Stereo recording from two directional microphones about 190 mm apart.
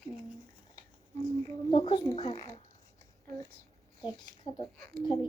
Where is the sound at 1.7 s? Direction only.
20° left (ahead or behind).